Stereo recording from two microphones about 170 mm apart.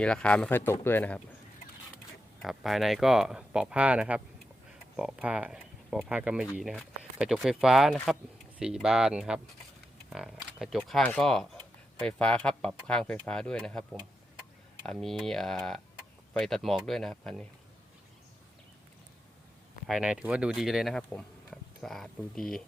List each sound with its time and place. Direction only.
0.0 s speech: 5° left (ahead or behind)
2.4 s speech: centre (ahead or behind)
14.8 s speech: centre (ahead or behind)
19.9 s speech: 5° right (ahead or behind)